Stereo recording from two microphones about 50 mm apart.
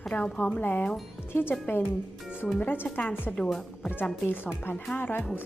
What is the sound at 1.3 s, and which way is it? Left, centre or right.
Speech, left.